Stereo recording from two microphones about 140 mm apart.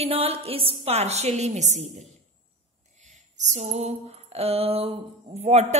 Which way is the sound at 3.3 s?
55° right (ahead or behind).